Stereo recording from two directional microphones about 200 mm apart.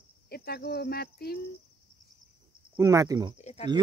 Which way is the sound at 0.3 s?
50° left (ahead or behind).